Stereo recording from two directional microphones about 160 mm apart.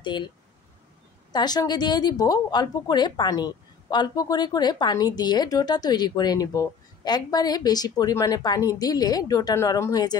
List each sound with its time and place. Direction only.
0.0 s speech: 30° left (ahead or behind)
1.3 s a woman's voice: 25° left (ahead or behind)